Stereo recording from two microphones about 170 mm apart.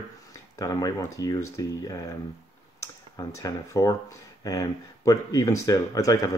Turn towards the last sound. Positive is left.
turn(degrees=20)  # may be behind; listen again after turning